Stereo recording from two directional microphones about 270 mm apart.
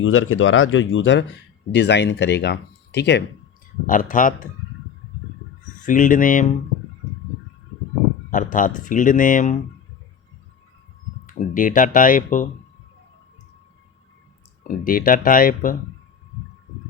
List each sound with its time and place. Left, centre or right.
0.0 s speech: left
5.8 s speech: left
8.3 s speech: left
11.3 s speech: left
14.8 s speech: left